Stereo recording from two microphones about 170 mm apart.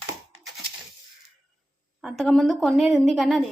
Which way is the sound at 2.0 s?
Centre (ahead or behind).